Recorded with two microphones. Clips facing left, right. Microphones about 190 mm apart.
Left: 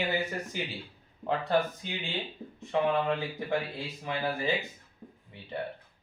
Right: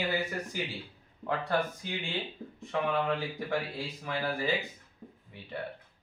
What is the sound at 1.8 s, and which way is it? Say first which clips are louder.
Speech: even; 25° left (ahead or behind).